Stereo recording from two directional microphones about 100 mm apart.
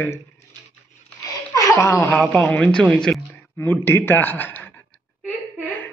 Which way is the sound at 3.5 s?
20° left (ahead or behind).